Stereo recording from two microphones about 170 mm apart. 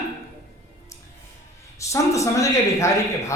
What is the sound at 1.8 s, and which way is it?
Speech, 20° left (ahead or behind).